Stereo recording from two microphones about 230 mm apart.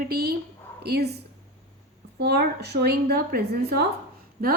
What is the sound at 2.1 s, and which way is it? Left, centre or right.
A woman's voice, right.